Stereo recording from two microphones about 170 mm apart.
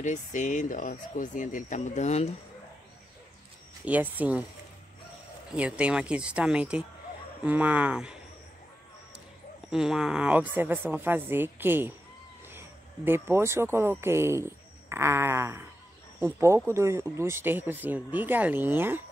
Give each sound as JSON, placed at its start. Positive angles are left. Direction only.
{"t": 0.0, "sound": "speech", "side_deg": 45}
{"t": 3.8, "sound": "speech", "side_deg": -10}
{"t": 5.6, "sound": "speech", "side_deg": -5}
{"t": 9.7, "sound": "speech", "side_deg": -5}